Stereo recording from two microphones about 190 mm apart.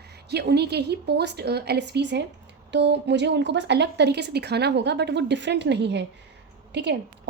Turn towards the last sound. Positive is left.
turn(degrees=-65)  # may be behind; listen again after turning